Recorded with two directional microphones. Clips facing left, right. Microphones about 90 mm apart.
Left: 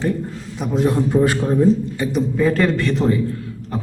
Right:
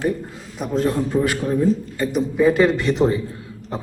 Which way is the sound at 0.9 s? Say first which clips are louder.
Left 4 dB; 25° left (ahead or behind).